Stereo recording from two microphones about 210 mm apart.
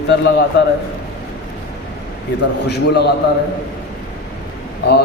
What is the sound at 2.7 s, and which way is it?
Speech, 50° left (ahead or behind).